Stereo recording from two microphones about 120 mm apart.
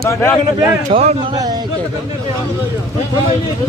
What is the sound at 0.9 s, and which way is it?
Speech, 55° right (ahead or behind).